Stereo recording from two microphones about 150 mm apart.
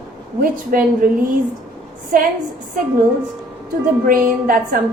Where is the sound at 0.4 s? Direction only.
70° right (ahead or behind).